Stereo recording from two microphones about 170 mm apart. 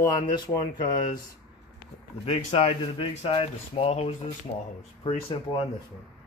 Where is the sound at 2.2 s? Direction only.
40° left (ahead or behind).